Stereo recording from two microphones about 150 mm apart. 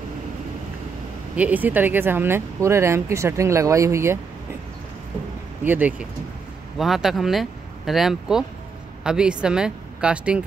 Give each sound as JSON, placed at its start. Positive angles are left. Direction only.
{"t": 1.3, "sound": "speech", "side_deg": -10}
{"t": 5.6, "sound": "speech", "side_deg": -10}